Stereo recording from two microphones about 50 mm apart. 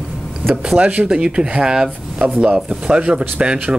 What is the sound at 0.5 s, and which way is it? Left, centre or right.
Speech, centre.